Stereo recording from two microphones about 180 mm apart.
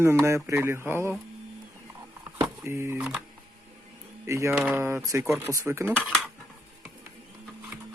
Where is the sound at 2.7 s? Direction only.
10° right (ahead or behind).